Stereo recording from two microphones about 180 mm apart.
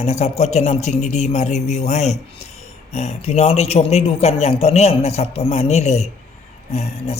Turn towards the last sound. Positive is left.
turn(degrees=35)  # may be behind; listen again after turning